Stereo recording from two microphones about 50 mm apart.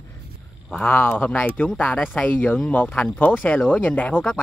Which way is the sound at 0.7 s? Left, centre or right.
Left.